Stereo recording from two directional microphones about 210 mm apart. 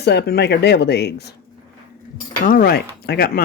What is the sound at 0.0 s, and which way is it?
Speech, 50° left (ahead or behind).